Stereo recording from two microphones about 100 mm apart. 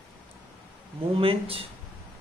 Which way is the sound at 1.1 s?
70° right (ahead or behind).